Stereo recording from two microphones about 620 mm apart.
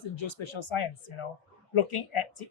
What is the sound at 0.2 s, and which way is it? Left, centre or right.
Speech, left.